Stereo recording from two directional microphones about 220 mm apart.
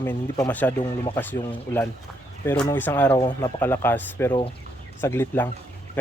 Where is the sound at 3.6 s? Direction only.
10° left (ahead or behind).